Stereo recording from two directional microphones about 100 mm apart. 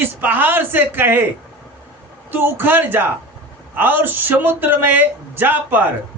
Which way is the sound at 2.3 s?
20° right (ahead or behind).